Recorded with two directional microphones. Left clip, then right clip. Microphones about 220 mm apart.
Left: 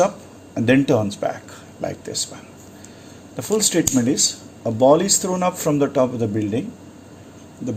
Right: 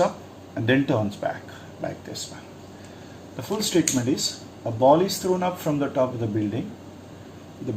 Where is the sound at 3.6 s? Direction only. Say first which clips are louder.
Left 2 dB; 60° left (ahead or behind).